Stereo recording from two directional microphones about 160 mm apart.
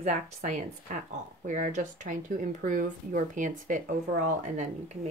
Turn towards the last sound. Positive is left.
turn(degrees=-50)  # may be behind; listen again after turning